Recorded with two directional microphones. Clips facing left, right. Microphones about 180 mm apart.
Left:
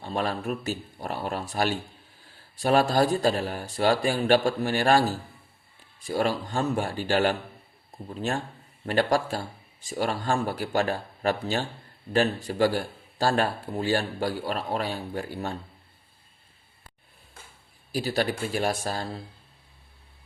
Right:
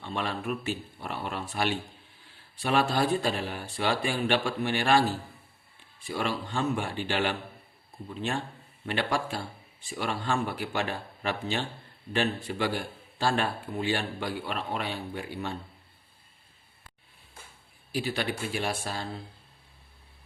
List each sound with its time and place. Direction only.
0.0 s speech: 40° left (ahead or behind)
17.9 s speech: 40° left (ahead or behind)